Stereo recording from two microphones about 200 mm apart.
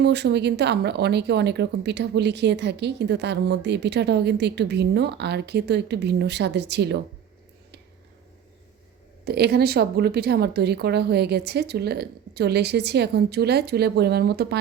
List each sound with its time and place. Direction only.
0.0 s speech: 55° right (ahead or behind)
9.2 s speech: 55° right (ahead or behind)